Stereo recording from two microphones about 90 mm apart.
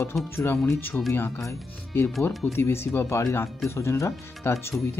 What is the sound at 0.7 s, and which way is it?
Speech, 25° left (ahead or behind).